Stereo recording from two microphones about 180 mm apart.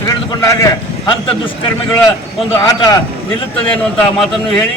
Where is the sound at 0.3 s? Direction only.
20° left (ahead or behind).